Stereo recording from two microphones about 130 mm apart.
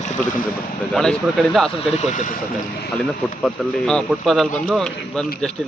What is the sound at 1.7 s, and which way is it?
Speech, 55° left (ahead or behind).